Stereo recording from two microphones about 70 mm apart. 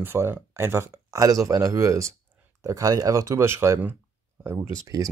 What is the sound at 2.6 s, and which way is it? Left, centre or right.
Speech, right.